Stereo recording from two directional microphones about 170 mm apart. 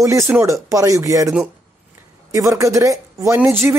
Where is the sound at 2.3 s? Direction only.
20° right (ahead or behind).